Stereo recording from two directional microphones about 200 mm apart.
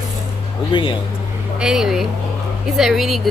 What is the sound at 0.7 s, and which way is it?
Speech, 25° left (ahead or behind).